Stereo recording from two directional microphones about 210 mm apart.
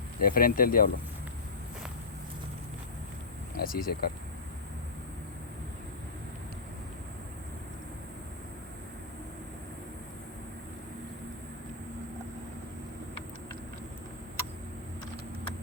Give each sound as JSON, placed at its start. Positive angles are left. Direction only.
{"t": 0.2, "sound": "speech", "side_deg": 45}
{"t": 3.6, "sound": "speech", "side_deg": 45}